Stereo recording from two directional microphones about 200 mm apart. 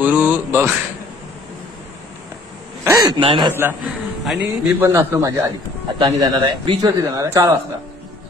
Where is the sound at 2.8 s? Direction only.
25° right (ahead or behind).